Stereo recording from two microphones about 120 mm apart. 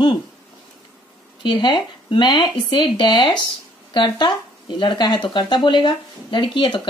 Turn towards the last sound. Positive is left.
turn(degrees=45)  # may be behind; listen again after turning